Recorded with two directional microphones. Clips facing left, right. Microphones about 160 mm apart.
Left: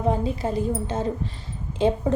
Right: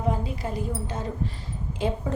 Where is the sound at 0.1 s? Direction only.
25° left (ahead or behind).